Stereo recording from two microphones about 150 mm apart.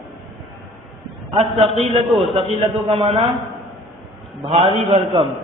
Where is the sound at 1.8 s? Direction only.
45° right (ahead or behind).